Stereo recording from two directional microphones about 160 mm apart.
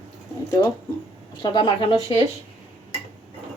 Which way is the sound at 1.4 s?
30° left (ahead or behind).